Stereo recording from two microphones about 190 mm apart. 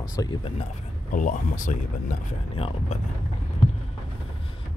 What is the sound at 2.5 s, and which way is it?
Speech, 30° left (ahead or behind).